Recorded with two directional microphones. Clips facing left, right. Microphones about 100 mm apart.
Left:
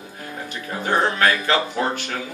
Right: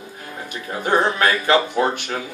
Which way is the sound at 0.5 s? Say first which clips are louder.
Right 3 dB; 20° right (ahead or behind).